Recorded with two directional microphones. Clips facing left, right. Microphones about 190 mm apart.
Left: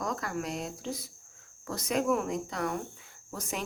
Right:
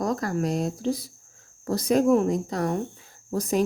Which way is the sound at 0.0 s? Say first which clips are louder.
Right 8 dB; 35° right (ahead or behind).